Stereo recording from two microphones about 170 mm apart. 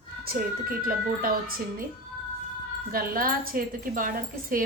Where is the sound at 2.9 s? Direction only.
60° right (ahead or behind).